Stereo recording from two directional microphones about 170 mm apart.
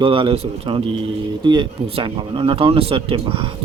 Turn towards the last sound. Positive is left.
turn(degrees=-30)  # may be behind; listen again after turning